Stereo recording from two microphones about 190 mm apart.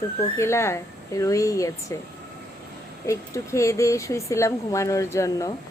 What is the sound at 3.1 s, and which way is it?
Speech, 15° left (ahead or behind).